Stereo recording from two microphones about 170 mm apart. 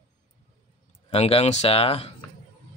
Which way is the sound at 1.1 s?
40° left (ahead or behind).